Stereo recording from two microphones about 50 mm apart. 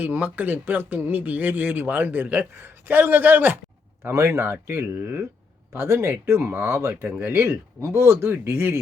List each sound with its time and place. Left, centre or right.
0.0 s speech: right
4.0 s speech: right
5.7 s speech: right